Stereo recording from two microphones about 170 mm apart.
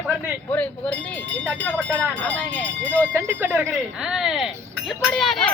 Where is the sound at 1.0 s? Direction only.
5° left (ahead or behind).